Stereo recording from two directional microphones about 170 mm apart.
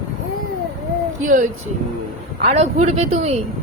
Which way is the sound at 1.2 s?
50° right (ahead or behind).